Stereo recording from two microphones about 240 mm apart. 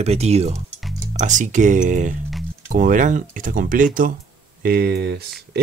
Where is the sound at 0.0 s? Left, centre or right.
Right.